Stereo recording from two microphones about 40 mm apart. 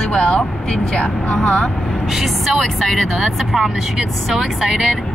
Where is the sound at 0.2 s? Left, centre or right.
Left.